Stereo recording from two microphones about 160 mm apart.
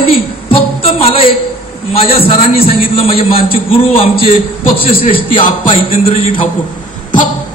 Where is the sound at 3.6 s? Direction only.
35° left (ahead or behind).